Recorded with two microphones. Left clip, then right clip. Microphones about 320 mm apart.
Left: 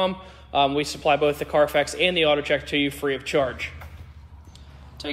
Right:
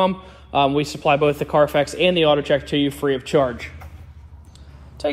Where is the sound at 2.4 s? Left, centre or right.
Centre.